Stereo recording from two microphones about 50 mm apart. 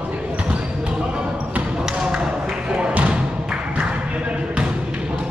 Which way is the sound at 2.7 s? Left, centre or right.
Right.